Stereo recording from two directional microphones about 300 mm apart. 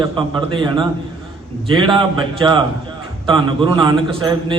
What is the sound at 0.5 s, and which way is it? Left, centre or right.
A man's voice, centre.